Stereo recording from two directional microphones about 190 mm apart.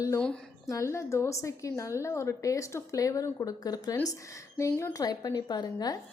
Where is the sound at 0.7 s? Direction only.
15° left (ahead or behind).